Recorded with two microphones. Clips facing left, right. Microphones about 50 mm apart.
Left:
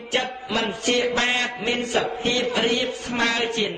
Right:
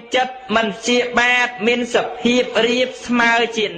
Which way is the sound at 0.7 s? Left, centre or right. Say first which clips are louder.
Right 5 dB; right.